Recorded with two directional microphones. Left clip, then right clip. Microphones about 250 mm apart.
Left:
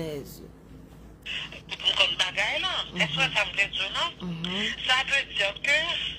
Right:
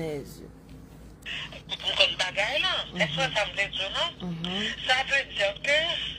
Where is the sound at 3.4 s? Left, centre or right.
Centre.